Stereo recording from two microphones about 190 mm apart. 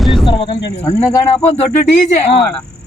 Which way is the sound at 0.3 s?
25° left (ahead or behind).